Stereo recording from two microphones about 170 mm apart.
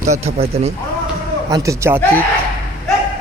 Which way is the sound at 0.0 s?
40° right (ahead or behind).